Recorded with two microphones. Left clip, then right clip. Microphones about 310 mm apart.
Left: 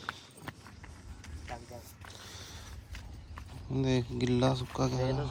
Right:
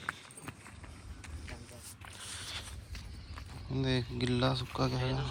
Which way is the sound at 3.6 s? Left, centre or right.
Centre.